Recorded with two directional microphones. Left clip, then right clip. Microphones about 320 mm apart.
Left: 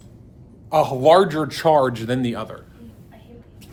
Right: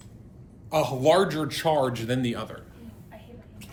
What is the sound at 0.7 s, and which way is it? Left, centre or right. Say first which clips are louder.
Speech: left 7 dB; centre.